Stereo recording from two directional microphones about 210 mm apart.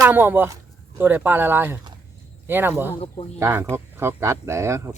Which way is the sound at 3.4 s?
10° right (ahead or behind).